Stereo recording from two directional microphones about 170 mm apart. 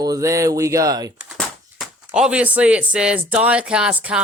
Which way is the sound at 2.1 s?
5° right (ahead or behind).